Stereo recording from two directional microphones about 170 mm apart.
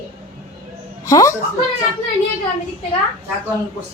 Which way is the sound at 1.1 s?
20° left (ahead or behind).